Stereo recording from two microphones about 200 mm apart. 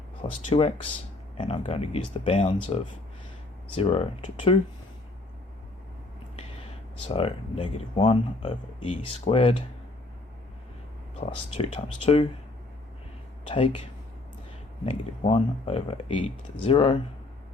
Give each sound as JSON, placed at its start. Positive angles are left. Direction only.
{"t": 0.4, "sound": "speech", "side_deg": 30}
{"t": 7.1, "sound": "speech", "side_deg": 30}
{"t": 11.2, "sound": "speech", "side_deg": 30}
{"t": 13.5, "sound": "speech", "side_deg": 25}
{"t": 14.8, "sound": "speech", "side_deg": 30}